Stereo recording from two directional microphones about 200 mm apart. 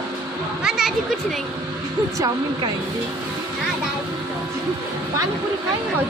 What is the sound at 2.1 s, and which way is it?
Speech, 20° right (ahead or behind).